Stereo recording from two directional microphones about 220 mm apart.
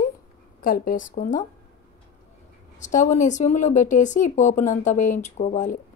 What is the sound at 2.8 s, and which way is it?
Speech, 35° left (ahead or behind).